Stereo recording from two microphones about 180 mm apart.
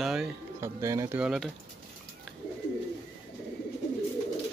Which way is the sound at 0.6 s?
15° right (ahead or behind).